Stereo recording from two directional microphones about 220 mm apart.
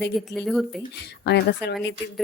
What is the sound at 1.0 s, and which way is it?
Speech, 50° left (ahead or behind).